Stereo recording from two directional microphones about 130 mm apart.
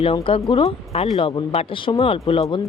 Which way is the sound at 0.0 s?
45° left (ahead or behind).